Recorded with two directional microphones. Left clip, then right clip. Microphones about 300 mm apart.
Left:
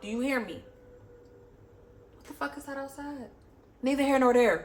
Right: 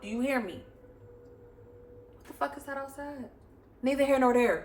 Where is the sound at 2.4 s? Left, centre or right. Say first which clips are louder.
Right 2 dB; centre.